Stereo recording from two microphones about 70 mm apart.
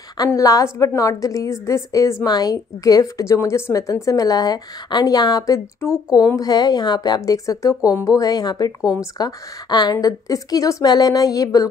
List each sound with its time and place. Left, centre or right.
0.4 s a woman's voice: left
2.2 s a woman's voice: left
3.3 s a woman's voice: left
5.8 s speech: left
6.3 s speech: left
7.2 s a woman's voice: left
8.2 s a woman's voice: left